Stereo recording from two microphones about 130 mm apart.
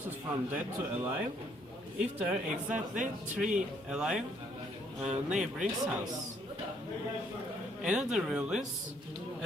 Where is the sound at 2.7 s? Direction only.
75° right (ahead or behind).